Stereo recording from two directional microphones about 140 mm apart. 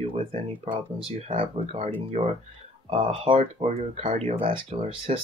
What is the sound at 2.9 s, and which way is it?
Speech, 40° right (ahead or behind).